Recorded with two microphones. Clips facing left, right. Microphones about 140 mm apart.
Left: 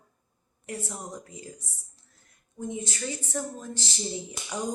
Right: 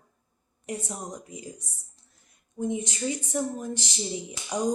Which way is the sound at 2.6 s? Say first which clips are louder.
Right 5 dB; 20° right (ahead or behind).